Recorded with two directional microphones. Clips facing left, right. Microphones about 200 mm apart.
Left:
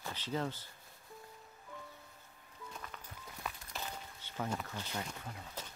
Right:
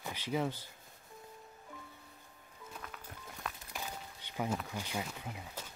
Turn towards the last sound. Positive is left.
turn(degrees=-15)  # may be behind; listen again after turning